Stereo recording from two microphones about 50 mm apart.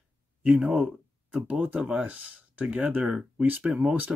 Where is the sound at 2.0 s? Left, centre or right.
Right.